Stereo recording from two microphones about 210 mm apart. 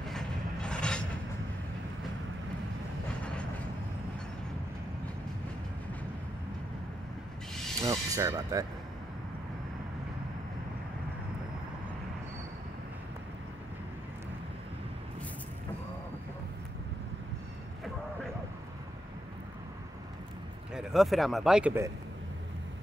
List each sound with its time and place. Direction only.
0.0 s mechanisms: 5° left (ahead or behind)
7.8 s speech: 15° right (ahead or behind)
20.7 s speech: centre (ahead or behind)